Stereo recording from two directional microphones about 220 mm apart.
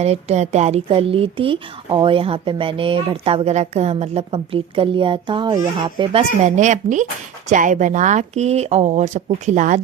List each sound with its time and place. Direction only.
0.0 s a woman's voice: 30° right (ahead or behind)